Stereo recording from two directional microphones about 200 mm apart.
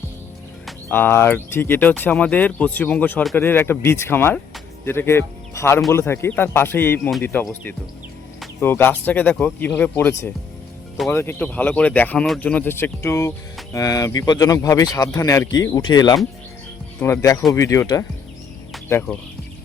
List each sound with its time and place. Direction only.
0.9 s speech: 10° left (ahead or behind)